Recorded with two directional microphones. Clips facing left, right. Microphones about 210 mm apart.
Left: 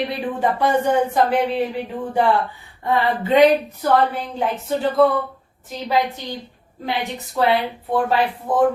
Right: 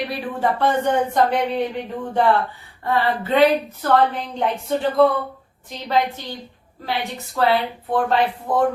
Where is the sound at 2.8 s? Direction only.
15° left (ahead or behind).